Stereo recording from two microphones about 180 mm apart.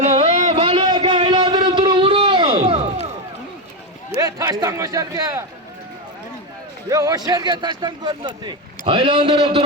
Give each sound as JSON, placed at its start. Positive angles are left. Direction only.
{"t": 0.0, "sound": "a sound", "side_deg": -40}
{"t": 4.2, "sound": "a man's voice", "side_deg": -20}
{"t": 6.9, "sound": "a man's voice", "side_deg": -20}